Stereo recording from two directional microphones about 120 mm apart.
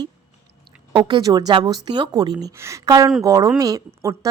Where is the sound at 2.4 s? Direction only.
25° right (ahead or behind).